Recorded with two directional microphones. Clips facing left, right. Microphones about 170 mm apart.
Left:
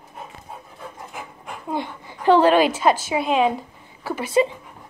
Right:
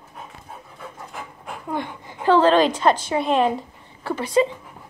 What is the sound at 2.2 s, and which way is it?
A woman's voice, 15° left (ahead or behind).